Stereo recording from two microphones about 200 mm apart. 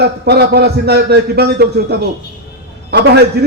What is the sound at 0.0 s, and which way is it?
A man's voice, 55° right (ahead or behind).